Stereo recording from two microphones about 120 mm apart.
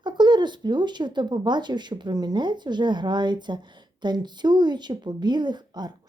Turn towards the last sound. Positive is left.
turn(degrees=-35)  # may be behind; listen again after turning